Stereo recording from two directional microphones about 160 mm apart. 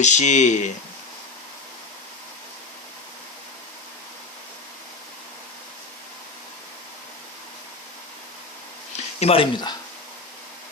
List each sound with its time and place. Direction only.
0.0 s speech: 50° left (ahead or behind)
9.2 s speech: 35° left (ahead or behind)